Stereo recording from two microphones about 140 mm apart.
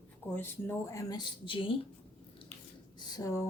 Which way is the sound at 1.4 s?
40° left (ahead or behind).